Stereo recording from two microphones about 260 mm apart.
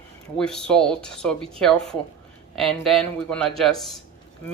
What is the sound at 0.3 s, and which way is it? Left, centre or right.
Speech, centre.